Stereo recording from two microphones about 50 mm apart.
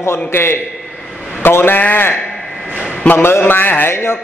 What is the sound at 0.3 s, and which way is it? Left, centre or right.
A man's voice, left.